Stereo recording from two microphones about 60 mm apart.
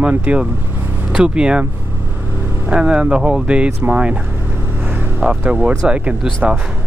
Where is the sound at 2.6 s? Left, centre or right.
Centre.